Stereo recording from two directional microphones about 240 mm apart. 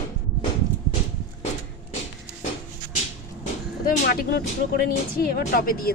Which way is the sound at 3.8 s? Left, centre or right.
Left.